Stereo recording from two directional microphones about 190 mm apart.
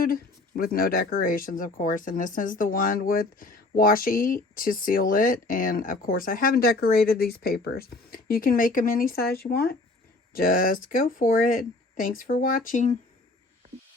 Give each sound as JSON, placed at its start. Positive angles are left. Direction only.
{"t": 0.0, "sound": "speech", "side_deg": 50}